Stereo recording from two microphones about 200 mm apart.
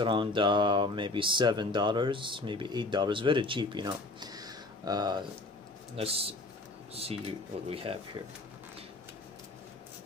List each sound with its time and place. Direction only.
0.0 s speech: 25° right (ahead or behind)